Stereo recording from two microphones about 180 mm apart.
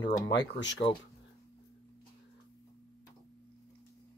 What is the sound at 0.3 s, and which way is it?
Speech, 75° left (ahead or behind).